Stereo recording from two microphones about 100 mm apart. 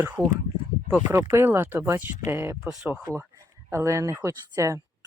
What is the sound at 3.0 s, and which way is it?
Speech, 35° right (ahead or behind).